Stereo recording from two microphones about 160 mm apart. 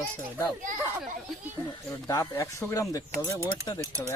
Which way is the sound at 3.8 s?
15° right (ahead or behind).